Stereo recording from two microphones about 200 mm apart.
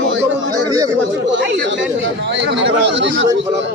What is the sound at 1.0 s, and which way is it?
Speech, 65° right (ahead or behind).